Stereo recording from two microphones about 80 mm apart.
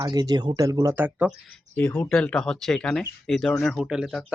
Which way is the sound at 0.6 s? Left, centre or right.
Right.